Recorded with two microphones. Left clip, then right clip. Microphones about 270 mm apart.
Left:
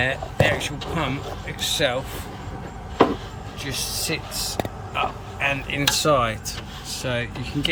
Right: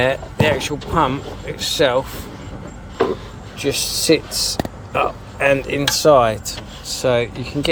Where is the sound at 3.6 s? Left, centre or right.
Centre.